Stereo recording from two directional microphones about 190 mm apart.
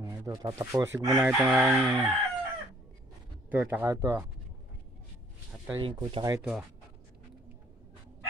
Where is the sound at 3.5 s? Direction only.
10° right (ahead or behind).